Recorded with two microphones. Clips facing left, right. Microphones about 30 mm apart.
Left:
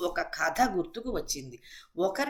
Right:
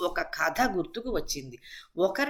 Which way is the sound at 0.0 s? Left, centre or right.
Centre.